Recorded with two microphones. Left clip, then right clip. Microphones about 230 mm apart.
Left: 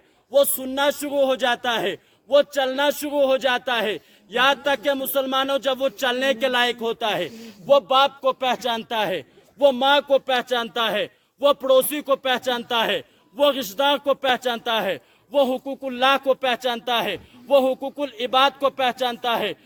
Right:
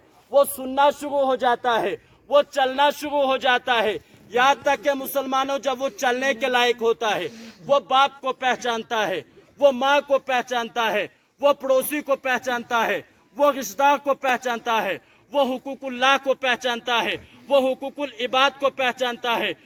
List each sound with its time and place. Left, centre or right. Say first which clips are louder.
0.3 s a man's voice: right 1 dB; left
1.8 s a man's voice: even; left
4.4 s music: right 1 dB; left
6.8 s a man's voice: right 2 dB; left